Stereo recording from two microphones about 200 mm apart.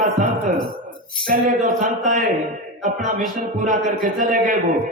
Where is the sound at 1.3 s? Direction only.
45° right (ahead or behind).